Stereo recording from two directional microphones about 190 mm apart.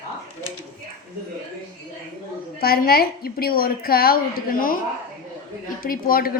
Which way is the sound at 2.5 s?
50° left (ahead or behind).